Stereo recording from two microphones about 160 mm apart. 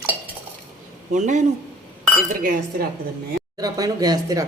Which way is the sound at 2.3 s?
60° right (ahead or behind).